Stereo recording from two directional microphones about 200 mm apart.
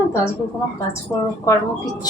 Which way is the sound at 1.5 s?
20° left (ahead or behind).